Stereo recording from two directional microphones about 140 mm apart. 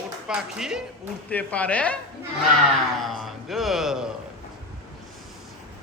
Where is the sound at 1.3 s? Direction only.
10° left (ahead or behind).